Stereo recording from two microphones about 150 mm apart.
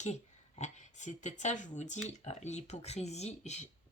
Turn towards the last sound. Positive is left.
turn(degrees=50)  # may be behind; listen again after turning